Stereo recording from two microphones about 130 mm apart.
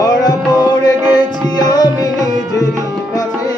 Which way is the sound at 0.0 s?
30° left (ahead or behind).